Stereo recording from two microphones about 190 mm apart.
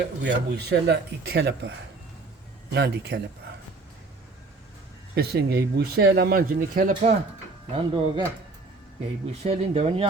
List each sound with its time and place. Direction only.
0.0 s speech: 65° right (ahead or behind)
2.7 s speech: 60° right (ahead or behind)
5.1 s speech: 55° right (ahead or behind)
7.7 s speech: 30° right (ahead or behind)
9.4 s speech: 35° right (ahead or behind)